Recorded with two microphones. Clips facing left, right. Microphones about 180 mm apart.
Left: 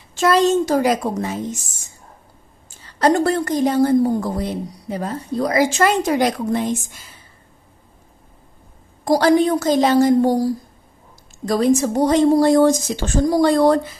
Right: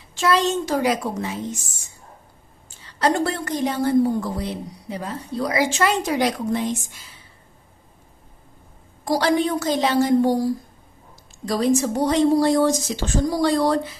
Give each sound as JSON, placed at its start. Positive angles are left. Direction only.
{"t": 0.2, "sound": "a woman's voice", "side_deg": 45}
{"t": 2.8, "sound": "a woman's voice", "side_deg": 45}
{"t": 9.0, "sound": "a woman's voice", "side_deg": 45}